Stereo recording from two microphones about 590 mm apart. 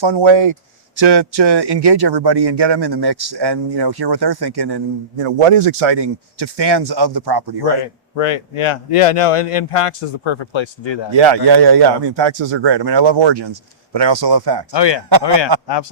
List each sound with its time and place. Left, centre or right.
0.0 s speech: right
5.2 s speech: right
8.1 s speech: left
11.1 s speech: right
14.7 s a man's voice: left